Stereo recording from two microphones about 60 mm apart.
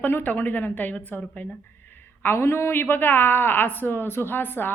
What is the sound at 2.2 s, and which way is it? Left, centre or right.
Speech, left.